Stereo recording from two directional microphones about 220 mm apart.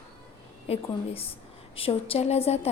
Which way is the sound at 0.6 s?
25° left (ahead or behind).